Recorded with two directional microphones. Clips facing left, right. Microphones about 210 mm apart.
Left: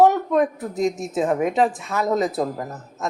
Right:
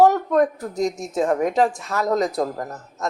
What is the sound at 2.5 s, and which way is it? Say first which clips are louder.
Speech: even; 15° left (ahead or behind).